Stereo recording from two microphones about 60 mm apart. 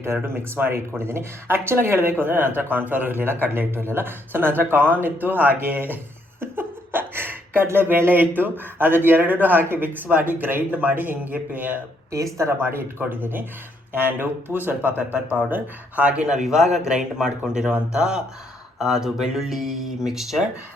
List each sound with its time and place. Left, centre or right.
0.0 s speech: right
12.1 s speech: right
12.5 s speech: right
16.0 s speech: centre